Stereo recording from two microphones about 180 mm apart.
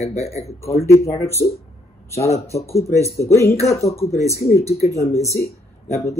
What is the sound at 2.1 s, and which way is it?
Speech, 15° left (ahead or behind).